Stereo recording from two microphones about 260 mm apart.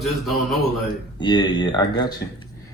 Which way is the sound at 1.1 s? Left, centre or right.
Centre.